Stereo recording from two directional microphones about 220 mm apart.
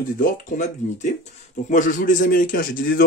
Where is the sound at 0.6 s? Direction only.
30° left (ahead or behind).